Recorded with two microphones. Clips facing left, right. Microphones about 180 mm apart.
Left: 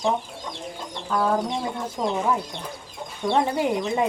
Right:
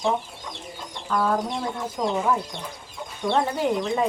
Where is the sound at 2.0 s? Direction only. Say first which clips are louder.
Even; 10° left (ahead or behind).